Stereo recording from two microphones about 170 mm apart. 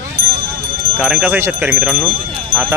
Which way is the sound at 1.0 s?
5° right (ahead or behind).